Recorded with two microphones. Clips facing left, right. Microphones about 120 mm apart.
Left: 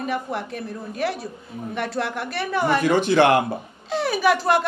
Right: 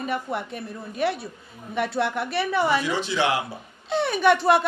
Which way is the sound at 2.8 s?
50° left (ahead or behind).